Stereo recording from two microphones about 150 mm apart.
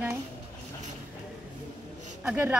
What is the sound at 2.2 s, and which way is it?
Speech, 10° right (ahead or behind).